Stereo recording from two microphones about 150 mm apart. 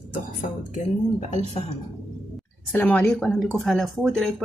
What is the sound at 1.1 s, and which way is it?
Speech, 50° left (ahead or behind).